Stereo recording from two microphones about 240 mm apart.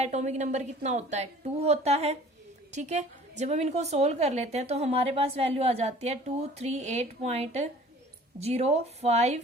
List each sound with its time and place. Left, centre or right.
0.0 s a woman's voice: right